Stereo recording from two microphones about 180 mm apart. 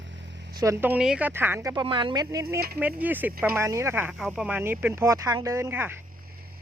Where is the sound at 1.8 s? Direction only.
25° right (ahead or behind).